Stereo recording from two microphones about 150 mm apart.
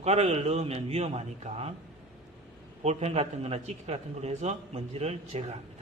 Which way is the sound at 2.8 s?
45° right (ahead or behind).